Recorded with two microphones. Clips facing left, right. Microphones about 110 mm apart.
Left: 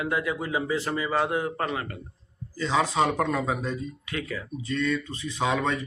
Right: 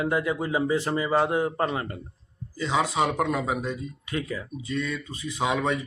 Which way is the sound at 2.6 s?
10° right (ahead or behind).